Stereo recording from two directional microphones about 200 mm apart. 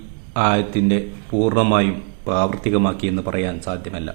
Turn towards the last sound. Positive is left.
turn(degrees=30)  # may be behind; listen again after turning